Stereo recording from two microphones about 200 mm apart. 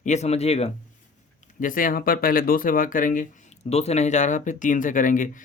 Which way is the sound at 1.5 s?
40° left (ahead or behind).